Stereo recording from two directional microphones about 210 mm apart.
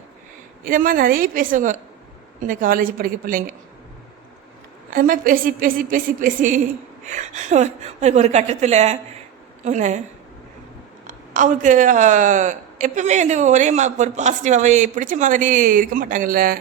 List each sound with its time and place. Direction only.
0.6 s a woman's voice: 40° right (ahead or behind)
4.9 s a woman's voice: 40° right (ahead or behind)
11.0 s a woman's voice: 35° right (ahead or behind)